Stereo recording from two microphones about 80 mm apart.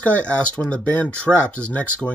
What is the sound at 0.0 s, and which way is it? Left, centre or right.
Speech, centre.